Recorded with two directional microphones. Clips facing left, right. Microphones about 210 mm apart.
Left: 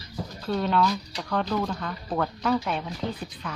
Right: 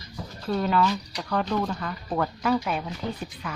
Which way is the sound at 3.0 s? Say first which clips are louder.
Left 2 dB; 30° left (ahead or behind).